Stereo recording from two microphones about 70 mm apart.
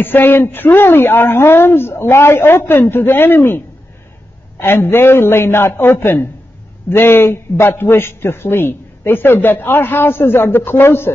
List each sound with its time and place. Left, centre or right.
0.0 s a man's voice: left